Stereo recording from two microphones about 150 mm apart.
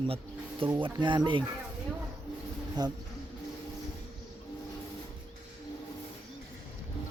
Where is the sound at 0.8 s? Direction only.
30° right (ahead or behind).